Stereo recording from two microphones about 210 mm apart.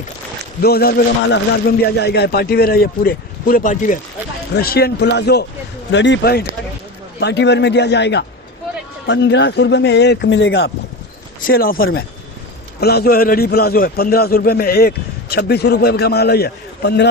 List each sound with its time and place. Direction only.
0.6 s a man's voice: 45° left (ahead or behind)
11.4 s a man's voice: 45° left (ahead or behind)